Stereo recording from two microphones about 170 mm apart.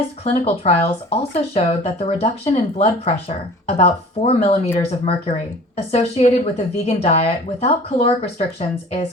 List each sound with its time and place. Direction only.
0.3 s speech: 35° left (ahead or behind)